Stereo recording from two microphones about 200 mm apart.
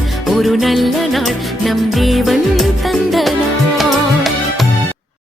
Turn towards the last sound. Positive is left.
turn(degrees=0)  # may be behind; listen again after turning